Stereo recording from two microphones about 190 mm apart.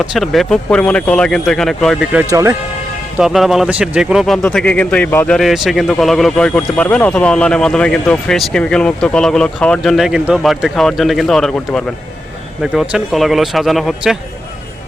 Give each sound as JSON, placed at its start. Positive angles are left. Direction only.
{"t": 0.0, "sound": "speech", "side_deg": 0}
{"t": 2.3, "sound": "speech", "side_deg": -15}
{"t": 3.2, "sound": "speech", "side_deg": 0}